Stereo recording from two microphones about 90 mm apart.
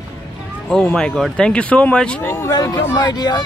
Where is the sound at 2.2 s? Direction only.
25° left (ahead or behind).